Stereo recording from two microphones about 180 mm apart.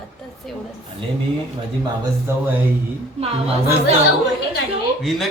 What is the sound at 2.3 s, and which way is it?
Speech, 15° right (ahead or behind).